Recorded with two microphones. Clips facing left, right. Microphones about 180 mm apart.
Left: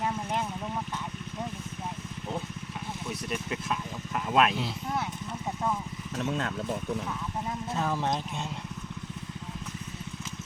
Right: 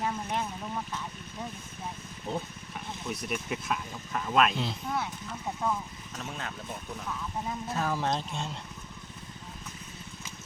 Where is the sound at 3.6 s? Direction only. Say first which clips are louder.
Left 1 dB; 5° left (ahead or behind).